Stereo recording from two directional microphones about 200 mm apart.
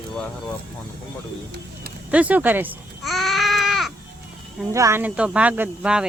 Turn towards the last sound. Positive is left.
turn(degrees=-5)  # may be behind; listen again after turning